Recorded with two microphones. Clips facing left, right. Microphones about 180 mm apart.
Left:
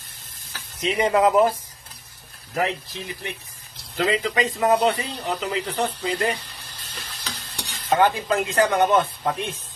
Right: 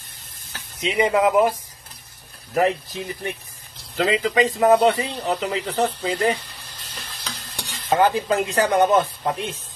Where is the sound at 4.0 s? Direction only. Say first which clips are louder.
Right 3 dB; 30° right (ahead or behind).